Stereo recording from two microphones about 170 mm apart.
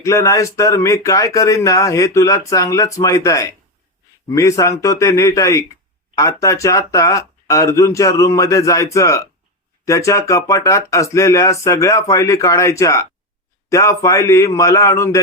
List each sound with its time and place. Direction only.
0.0 s speech: 20° left (ahead or behind)